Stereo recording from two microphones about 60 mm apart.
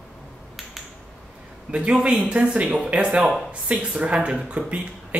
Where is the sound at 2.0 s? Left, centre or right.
Centre.